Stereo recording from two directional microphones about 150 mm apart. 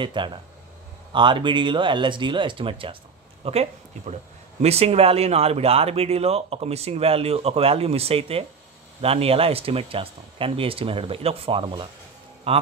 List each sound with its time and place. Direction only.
0.0 s speech: 30° right (ahead or behind)